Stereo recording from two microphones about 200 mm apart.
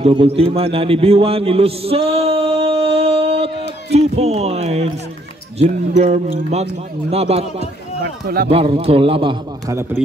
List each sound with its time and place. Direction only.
0.0 s a man's voice: 25° right (ahead or behind)
8.0 s speech: 50° right (ahead or behind)
8.5 s a man's voice: 30° right (ahead or behind)